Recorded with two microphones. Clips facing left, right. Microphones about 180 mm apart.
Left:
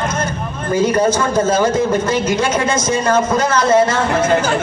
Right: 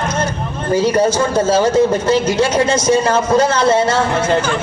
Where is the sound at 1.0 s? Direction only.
30° right (ahead or behind).